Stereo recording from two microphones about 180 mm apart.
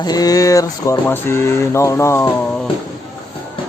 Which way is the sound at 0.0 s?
20° left (ahead or behind).